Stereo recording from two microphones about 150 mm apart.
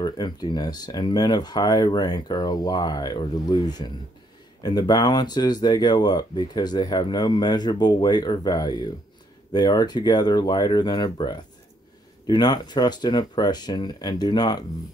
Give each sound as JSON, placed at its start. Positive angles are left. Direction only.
{"t": 0.0, "sound": "speech", "side_deg": 30}